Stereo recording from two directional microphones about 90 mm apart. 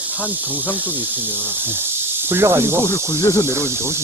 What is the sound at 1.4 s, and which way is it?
Speech, 25° right (ahead or behind).